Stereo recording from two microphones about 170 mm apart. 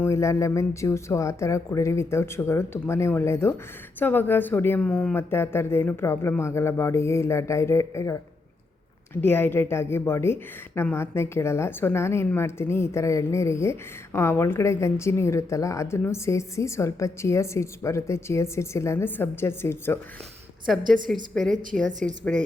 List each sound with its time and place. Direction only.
0.0 s a woman's voice: 15° left (ahead or behind)
9.2 s a woman's voice: 15° left (ahead or behind)
20.7 s a woman's voice: centre (ahead or behind)